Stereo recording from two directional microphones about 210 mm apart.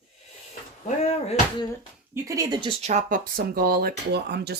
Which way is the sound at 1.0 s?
30° left (ahead or behind).